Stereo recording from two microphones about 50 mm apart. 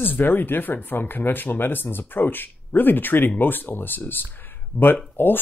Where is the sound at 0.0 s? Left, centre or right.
Left.